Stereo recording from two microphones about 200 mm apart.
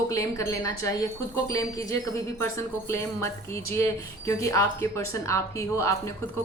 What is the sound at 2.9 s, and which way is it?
A woman's voice, 15° left (ahead or behind).